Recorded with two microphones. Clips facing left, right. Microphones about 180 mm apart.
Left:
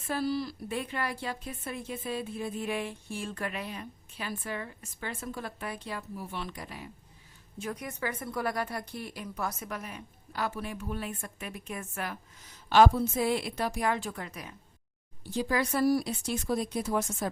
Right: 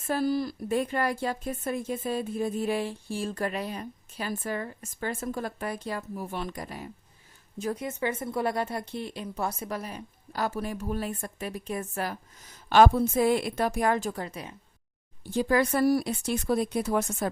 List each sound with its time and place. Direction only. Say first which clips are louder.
0.1 s speech: right 4 dB; 50° right (ahead or behind)
7.6 s speech: right 5 dB; 30° right (ahead or behind)
12.6 s speech: right 2 dB; 55° right (ahead or behind); by 14.5 s 30° right (ahead or behind)
15.3 s speech: right 5 dB; 50° right (ahead or behind)